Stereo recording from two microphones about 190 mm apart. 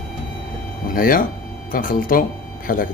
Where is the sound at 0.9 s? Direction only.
50° left (ahead or behind).